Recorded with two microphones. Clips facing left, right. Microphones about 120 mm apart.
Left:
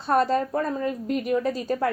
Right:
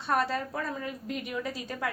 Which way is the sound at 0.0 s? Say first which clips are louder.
Left 7 dB; 35° left (ahead or behind).